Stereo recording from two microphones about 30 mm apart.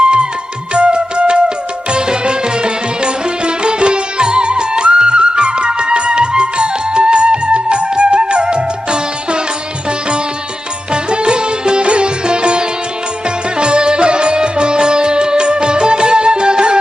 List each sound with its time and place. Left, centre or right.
0.0 s music: right
10.9 s music: right